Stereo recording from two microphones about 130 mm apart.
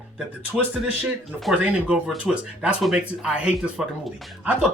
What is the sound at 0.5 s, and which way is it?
Speech, 15° right (ahead or behind).